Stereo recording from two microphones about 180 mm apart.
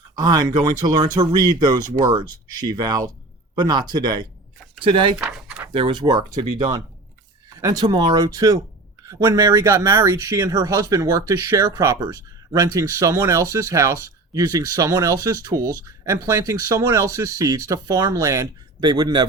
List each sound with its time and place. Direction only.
0.2 s speech: 20° right (ahead or behind)
5.2 s a sound: 5° right (ahead or behind)
5.7 s speech: 25° right (ahead or behind)